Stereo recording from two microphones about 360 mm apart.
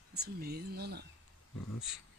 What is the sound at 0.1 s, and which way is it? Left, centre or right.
Speech, right.